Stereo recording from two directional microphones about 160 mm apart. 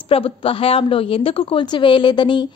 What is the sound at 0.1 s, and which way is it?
A woman's voice, 35° left (ahead or behind).